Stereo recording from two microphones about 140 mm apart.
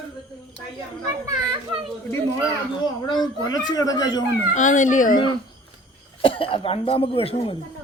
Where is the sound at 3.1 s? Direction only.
30° left (ahead or behind).